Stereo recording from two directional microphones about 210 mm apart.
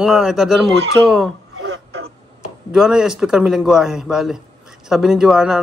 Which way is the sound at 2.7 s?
Centre (ahead or behind).